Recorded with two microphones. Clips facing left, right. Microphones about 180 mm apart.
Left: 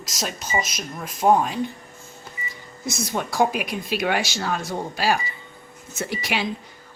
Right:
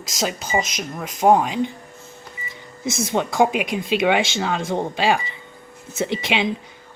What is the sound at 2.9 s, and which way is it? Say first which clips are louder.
Speech: right 5 dB; 25° right (ahead or behind).